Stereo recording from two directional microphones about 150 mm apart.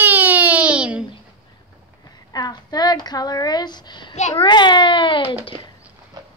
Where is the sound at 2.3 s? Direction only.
25° left (ahead or behind).